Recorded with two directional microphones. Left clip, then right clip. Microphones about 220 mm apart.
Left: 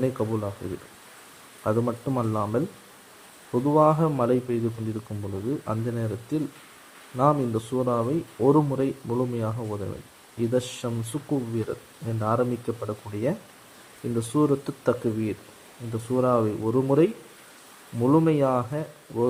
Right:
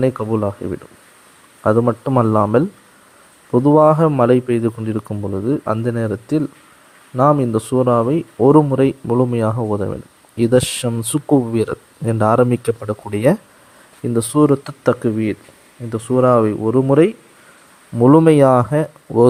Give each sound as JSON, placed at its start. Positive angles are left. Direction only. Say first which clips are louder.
{"t": 0.0, "sound": "speech", "louder": "right 9 dB", "side_deg": -40}
{"t": 1.6, "sound": "speech", "louder": "right 11 dB", "side_deg": -40}